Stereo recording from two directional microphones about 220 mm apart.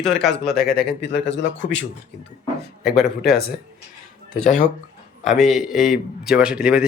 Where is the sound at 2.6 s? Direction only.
45° left (ahead or behind).